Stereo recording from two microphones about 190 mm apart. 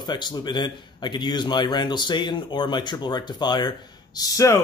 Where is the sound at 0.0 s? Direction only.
25° left (ahead or behind).